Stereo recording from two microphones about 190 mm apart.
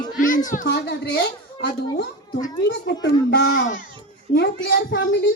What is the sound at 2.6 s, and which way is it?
Speech, 65° left (ahead or behind).